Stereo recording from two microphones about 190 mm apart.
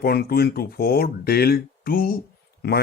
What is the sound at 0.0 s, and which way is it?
Speech, 55° left (ahead or behind).